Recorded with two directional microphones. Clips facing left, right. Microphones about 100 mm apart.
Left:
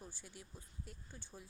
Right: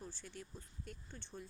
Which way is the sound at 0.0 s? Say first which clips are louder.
Right 4 dB; 10° left (ahead or behind).